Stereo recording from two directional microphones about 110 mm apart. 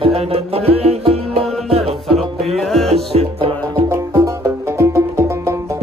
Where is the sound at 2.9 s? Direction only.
70° right (ahead or behind).